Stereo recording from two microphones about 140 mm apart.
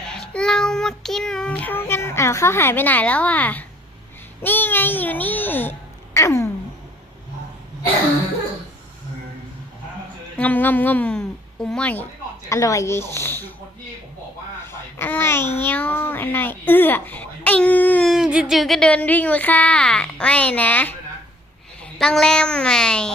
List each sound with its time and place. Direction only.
0.1 s child singing: 5° left (ahead or behind)
4.4 s speech: 15° left (ahead or behind)
6.1 s a sound: 20° left (ahead or behind)
10.3 s speech: 10° left (ahead or behind)
12.5 s speech: 20° left (ahead or behind)
14.7 s babbling: 15° left (ahead or behind)
15.6 s speech: 15° left (ahead or behind)
18.1 s speech: 5° right (ahead or behind); by 20.9 s 10° left (ahead or behind)
21.9 s speech: 5° left (ahead or behind)